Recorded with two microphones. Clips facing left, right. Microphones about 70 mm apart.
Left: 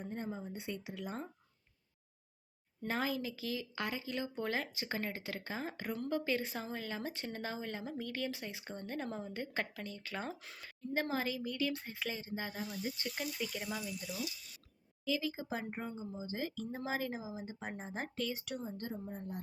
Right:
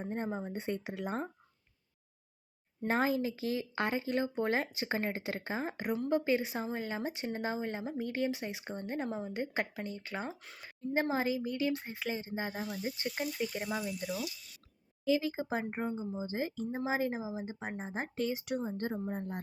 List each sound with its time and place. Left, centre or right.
0.0 s speech: right
2.8 s speech: right
10.3 s speech: centre
10.7 s speech: right
13.8 s speech: right
18.8 s speech: right